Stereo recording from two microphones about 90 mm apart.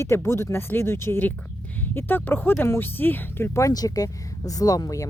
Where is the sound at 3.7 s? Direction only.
45° left (ahead or behind).